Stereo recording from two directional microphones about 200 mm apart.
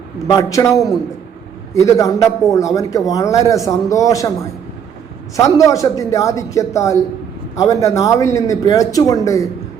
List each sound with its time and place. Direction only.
0.3 s speech: 15° left (ahead or behind)